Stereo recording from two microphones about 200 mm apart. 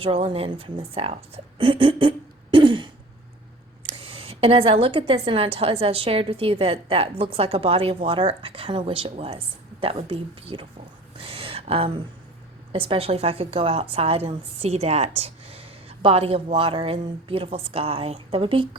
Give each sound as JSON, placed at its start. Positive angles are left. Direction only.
{"t": 0.0, "sound": "a woman's voice", "side_deg": -30}
{"t": 11.2, "sound": "a sound", "side_deg": -30}
{"t": 12.7, "sound": "a woman's voice", "side_deg": -30}